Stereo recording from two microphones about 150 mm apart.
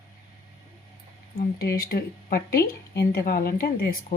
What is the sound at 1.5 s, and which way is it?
Speech, 90° left.